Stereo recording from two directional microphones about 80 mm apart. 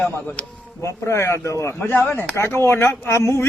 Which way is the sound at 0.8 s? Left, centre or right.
Left.